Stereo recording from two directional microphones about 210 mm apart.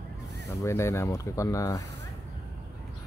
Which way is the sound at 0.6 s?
15° left (ahead or behind).